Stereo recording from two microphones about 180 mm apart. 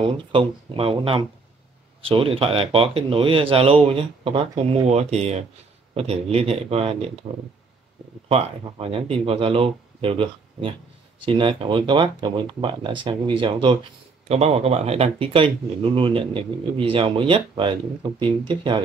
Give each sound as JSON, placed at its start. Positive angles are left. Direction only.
{"t": 0.0, "sound": "speech", "side_deg": -30}
{"t": 8.3, "sound": "speech", "side_deg": -35}